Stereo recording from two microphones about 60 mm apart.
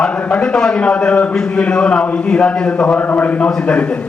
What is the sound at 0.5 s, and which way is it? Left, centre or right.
A man's voice, centre.